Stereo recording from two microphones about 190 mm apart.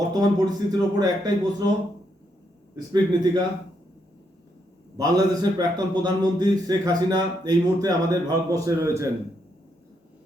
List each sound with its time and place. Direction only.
0.1 s a man's voice: 20° right (ahead or behind)
2.7 s a man's voice: 20° right (ahead or behind)
4.9 s a man's voice: 20° right (ahead or behind)